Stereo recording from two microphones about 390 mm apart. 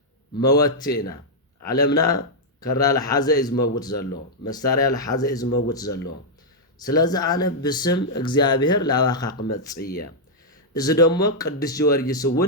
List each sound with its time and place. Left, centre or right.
0.3 s speech: centre
9.7 s speech: left
10.8 s speech: centre